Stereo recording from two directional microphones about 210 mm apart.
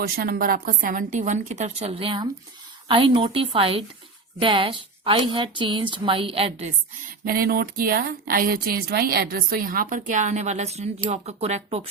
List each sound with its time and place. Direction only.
0.0 s a woman's voice: 45° right (ahead or behind); by 6.7 s 30° right (ahead or behind)
7.3 s speech: 45° right (ahead or behind); by 11.9 s 30° right (ahead or behind)